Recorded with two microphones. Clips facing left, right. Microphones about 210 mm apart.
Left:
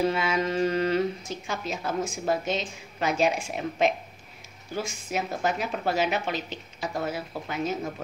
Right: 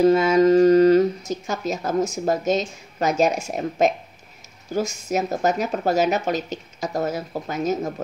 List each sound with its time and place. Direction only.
0.0 s speech: 40° right (ahead or behind)